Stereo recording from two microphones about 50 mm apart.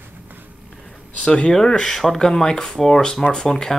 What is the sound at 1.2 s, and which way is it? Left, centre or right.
Speech, centre.